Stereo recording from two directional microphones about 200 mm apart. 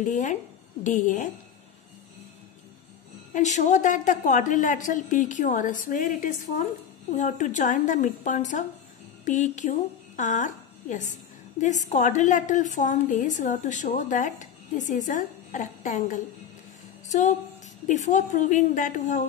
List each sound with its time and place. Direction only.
0.0 s a woman's voice: 40° left (ahead or behind)
3.3 s a woman's voice: 35° left (ahead or behind)
17.8 s a woman's voice: 35° left (ahead or behind)